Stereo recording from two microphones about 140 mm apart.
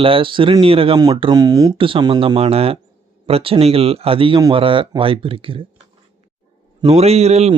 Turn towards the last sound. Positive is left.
turn(degrees=-50)  # may be behind; listen again after turning